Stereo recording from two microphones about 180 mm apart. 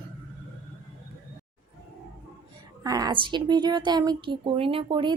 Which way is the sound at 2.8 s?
20° right (ahead or behind).